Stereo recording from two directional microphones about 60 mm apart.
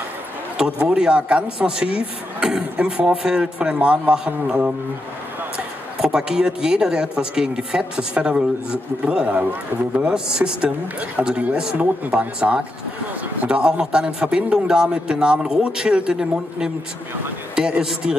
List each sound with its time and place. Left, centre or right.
0.6 s a man's voice: centre
5.9 s speech: centre